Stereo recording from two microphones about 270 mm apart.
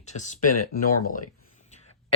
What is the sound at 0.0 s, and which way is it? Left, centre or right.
Speech, left.